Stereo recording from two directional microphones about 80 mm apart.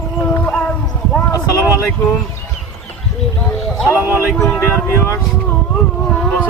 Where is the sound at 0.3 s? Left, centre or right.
Centre.